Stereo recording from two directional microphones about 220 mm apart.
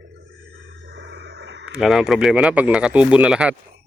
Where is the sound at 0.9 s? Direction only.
55° right (ahead or behind).